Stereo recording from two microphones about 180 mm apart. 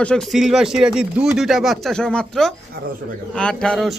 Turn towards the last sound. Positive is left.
turn(degrees=0)  # may be behind; listen again after turning